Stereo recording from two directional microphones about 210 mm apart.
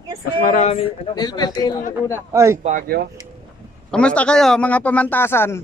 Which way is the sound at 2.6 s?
40° right (ahead or behind).